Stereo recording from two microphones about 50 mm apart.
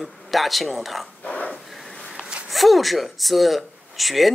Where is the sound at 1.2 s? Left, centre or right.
Left.